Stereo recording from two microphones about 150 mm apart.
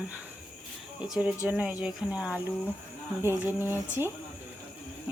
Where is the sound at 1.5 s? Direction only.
10° right (ahead or behind).